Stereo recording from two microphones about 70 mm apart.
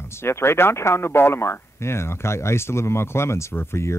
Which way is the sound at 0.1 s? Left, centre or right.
Left.